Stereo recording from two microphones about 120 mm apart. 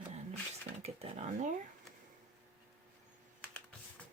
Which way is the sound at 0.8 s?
60° right (ahead or behind).